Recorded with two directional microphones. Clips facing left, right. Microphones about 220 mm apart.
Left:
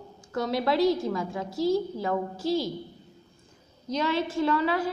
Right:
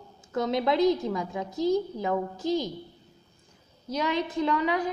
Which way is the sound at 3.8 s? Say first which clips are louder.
Left 1 dB; 15° right (ahead or behind).